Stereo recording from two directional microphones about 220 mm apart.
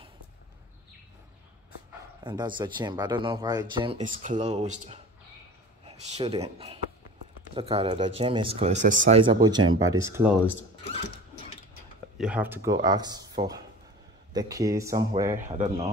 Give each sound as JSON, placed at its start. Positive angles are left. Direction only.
{"t": 2.2, "sound": "speech", "side_deg": -20}
{"t": 9.2, "sound": "a man's voice", "side_deg": -20}
{"t": 12.2, "sound": "a man's voice", "side_deg": -5}
{"t": 14.3, "sound": "a man's voice", "side_deg": -15}
{"t": 15.3, "sound": "speech", "side_deg": -35}